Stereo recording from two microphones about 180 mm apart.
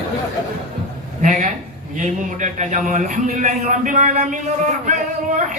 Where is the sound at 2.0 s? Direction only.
45° right (ahead or behind).